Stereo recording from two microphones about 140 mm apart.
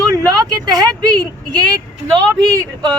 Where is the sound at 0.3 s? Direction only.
30° right (ahead or behind).